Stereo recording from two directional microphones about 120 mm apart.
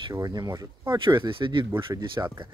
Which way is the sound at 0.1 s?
35° right (ahead or behind).